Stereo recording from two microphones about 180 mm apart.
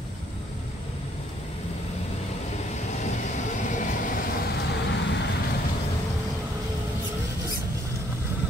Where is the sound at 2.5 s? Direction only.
40° left (ahead or behind); by 5.3 s 75° left (ahead or behind).